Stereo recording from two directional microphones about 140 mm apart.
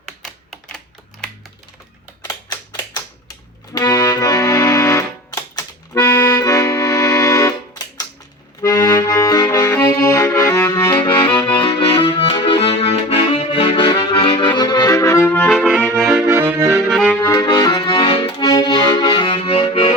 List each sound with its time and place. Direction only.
0.2 s typing: 5° left (ahead or behind)
2.2 s typewriter: 30° left (ahead or behind)
3.8 s accordion: 25° left (ahead or behind)
11.3 s music: 15° left (ahead or behind)
11.6 s accordion: 35° left (ahead or behind); by 15.7 s 5° left (ahead or behind)
16.0 s accordion: 15° right (ahead or behind)
16.9 s accordion: 5° left (ahead or behind)
17.4 s accordion: 30° left (ahead or behind)